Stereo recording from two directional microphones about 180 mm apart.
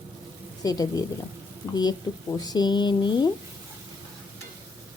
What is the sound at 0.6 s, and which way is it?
Speech, 20° left (ahead or behind).